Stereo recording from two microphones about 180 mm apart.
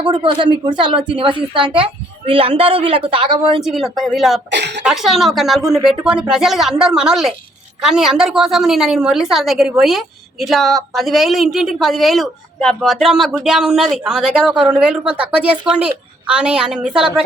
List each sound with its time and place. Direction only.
0.0 s a woman's voice: 25° right (ahead or behind)
3.6 s a woman's voice: centre (ahead or behind)
4.5 s speech: 70° right (ahead or behind)
4.9 s a woman's voice: centre (ahead or behind)